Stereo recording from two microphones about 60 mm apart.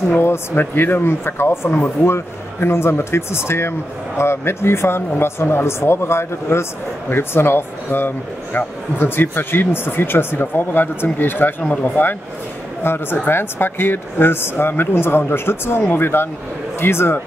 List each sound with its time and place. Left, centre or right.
0.2 s speech: left